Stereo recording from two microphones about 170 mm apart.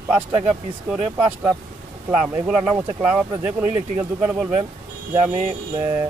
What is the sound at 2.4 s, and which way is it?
Speech, 5° right (ahead or behind).